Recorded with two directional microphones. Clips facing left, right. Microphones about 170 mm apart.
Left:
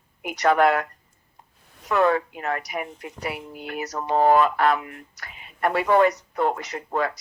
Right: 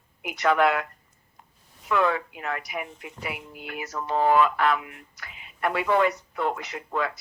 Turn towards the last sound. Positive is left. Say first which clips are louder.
# left 3 dB
turn(degrees=40)  # may be behind; listen again after turning